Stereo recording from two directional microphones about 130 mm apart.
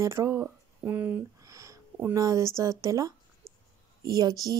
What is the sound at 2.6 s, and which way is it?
A woman's voice, 25° right (ahead or behind).